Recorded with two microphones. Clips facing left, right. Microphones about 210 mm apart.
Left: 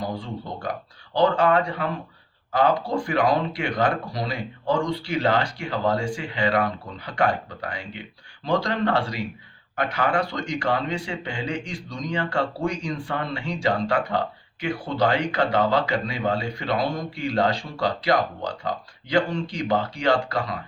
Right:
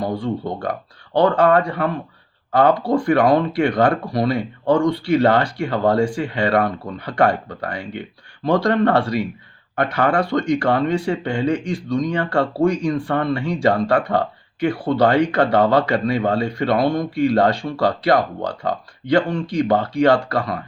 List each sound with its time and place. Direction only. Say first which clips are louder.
1.1 s speech: right 5 dB; 55° right (ahead or behind)